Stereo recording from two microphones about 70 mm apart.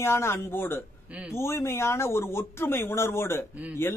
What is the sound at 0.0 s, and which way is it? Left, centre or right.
A man's voice, left.